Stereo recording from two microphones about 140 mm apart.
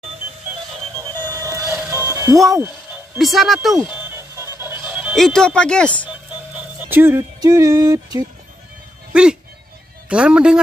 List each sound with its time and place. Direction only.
0.9 s music: 20° right (ahead or behind)
3.2 s speech: centre (ahead or behind)
3.8 s music: 10° right (ahead or behind)
4.8 s speech: 5° right (ahead or behind)
6.5 s speech: 15° right (ahead or behind)
9.1 s a man's voice: 5° right (ahead or behind)